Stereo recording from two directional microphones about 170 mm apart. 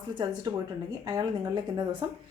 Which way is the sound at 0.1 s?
25° right (ahead or behind).